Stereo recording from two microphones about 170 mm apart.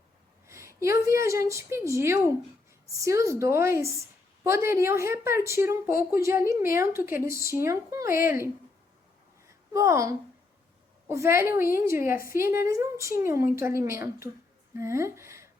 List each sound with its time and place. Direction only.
0.4 s a woman's voice: 15° right (ahead or behind)
9.7 s a woman's voice: 20° right (ahead or behind)